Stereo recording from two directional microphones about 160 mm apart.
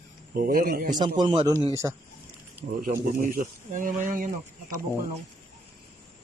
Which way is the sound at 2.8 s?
60° right (ahead or behind).